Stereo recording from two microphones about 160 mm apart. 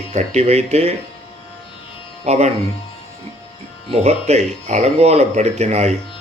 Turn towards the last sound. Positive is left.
turn(degrees=-45)  # may be behind; listen again after turning